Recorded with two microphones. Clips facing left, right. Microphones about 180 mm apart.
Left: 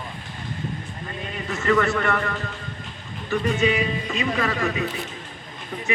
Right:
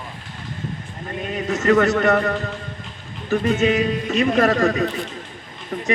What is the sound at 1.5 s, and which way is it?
A man's voice, 40° right (ahead or behind).